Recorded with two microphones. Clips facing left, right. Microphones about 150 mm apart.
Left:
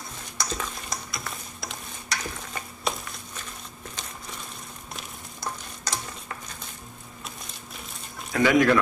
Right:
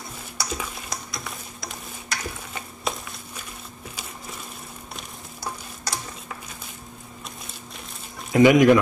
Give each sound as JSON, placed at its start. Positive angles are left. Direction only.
{"t": 0.4, "sound": "frying", "side_deg": -10}
{"t": 0.8, "sound": "stir", "side_deg": 0}
{"t": 5.4, "sound": "stir", "side_deg": -10}
{"t": 8.3, "sound": "speech", "side_deg": -20}